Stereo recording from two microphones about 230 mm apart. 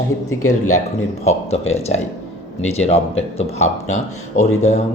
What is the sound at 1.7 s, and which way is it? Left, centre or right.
A man's voice, left.